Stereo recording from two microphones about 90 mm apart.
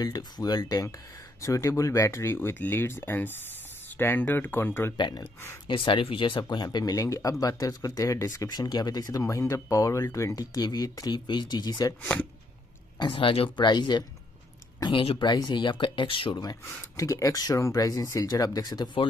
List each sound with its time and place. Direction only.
0.0 s speech: 45° left (ahead or behind)
1.4 s speech: 35° left (ahead or behind)
4.9 s speech: 55° left (ahead or behind)
5.2 s speech: 30° left (ahead or behind)
5.7 s speech: 65° left (ahead or behind); by 8.5 s 35° left (ahead or behind)
8.5 s speech: 50° left (ahead or behind)
10.5 s speech: 45° left (ahead or behind)
12.0 s speech: 15° left (ahead or behind)
13.0 s speech: 70° left (ahead or behind)
13.7 s speech: 55° left (ahead or behind)
14.9 s speech: 70° left (ahead or behind)
16.6 s speech: 35° left (ahead or behind)